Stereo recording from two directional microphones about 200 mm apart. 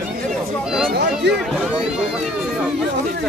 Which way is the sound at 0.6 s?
Centre (ahead or behind).